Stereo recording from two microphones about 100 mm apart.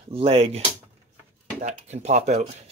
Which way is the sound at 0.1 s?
85° right.